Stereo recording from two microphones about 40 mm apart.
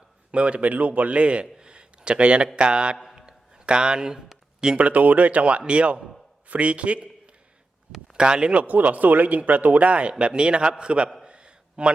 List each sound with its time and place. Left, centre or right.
0.3 s a man's voice: right
3.2 s a sound: right
4.8 s speech: right
8.1 s speech: right
8.5 s a man's voice: right
11.3 s a sound: right